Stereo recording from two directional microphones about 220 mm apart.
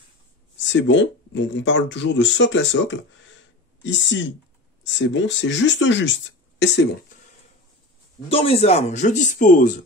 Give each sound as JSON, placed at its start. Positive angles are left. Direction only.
{"t": 0.6, "sound": "speech", "side_deg": 55}
{"t": 8.3, "sound": "speech", "side_deg": 25}